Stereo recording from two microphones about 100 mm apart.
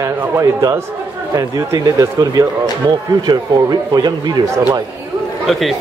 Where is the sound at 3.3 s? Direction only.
45° right (ahead or behind).